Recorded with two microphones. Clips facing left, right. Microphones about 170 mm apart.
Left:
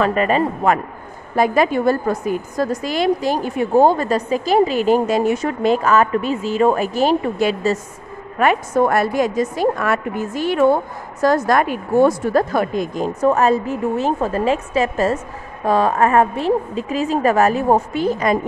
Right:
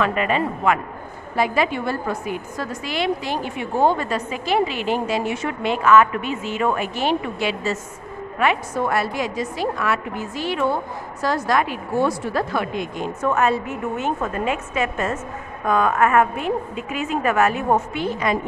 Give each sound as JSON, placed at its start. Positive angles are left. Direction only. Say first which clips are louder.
{"t": 0.0, "sound": "a woman's voice", "louder": "left 4 dB", "side_deg": 40}